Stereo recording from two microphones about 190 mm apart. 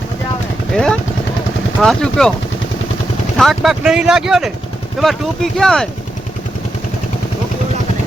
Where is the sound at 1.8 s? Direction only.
5° left (ahead or behind).